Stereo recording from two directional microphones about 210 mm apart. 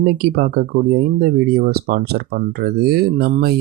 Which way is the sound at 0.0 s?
45° right (ahead or behind).